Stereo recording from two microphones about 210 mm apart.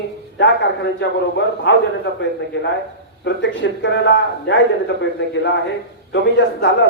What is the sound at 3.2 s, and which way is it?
A man's voice, 60° left (ahead or behind).